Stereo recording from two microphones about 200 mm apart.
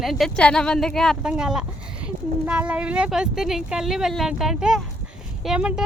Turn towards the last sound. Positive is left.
turn(degrees=-5)  # may be behind; listen again after turning